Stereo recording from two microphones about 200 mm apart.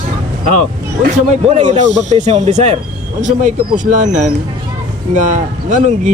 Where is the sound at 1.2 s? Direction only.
35° right (ahead or behind).